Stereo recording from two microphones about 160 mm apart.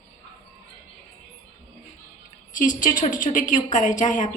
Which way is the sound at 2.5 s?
55° left (ahead or behind).